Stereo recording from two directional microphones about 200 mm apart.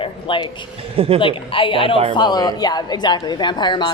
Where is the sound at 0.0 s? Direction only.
25° left (ahead or behind).